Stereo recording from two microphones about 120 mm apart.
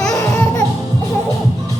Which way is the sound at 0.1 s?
25° left (ahead or behind).